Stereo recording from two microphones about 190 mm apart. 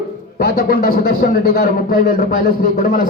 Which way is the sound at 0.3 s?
50° left (ahead or behind).